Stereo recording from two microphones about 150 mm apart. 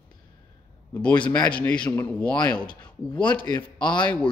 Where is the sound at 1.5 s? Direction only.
10° left (ahead or behind).